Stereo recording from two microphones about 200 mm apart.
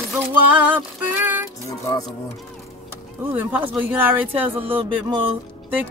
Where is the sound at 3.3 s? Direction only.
5° right (ahead or behind).